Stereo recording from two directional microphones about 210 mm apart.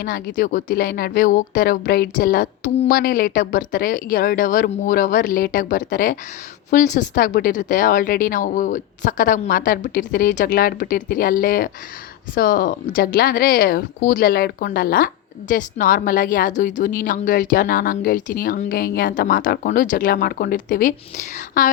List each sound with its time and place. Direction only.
0.0 s a woman's voice: 45° left (ahead or behind)